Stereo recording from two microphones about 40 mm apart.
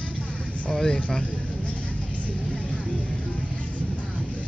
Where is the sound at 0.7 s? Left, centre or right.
Centre.